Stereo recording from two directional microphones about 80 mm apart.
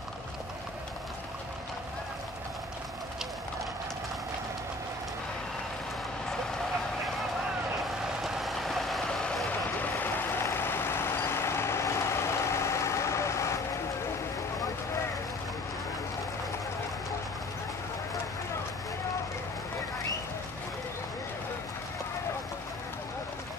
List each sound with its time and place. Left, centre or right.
8.2 s vehicle: centre
9.8 s vehicle: left